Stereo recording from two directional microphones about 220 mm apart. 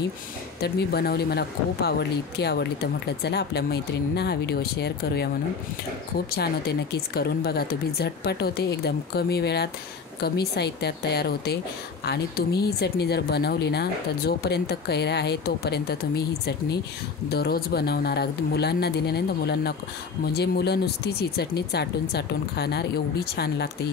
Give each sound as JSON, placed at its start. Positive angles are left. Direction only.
{"t": 0.6, "sound": "speech", "side_deg": 45}
{"t": 6.3, "sound": "speech", "side_deg": 45}
{"t": 17.3, "sound": "speech", "side_deg": 45}